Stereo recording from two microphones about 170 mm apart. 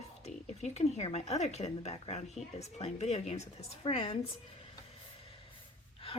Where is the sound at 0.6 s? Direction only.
40° left (ahead or behind).